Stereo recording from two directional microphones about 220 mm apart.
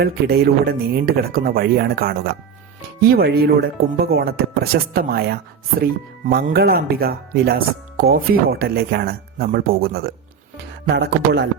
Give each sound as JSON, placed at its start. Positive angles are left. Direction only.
{"t": 0.0, "sound": "speech", "side_deg": -45}